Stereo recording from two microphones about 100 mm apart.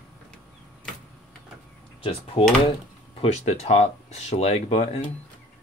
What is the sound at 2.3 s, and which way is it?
Speech, 60° left (ahead or behind).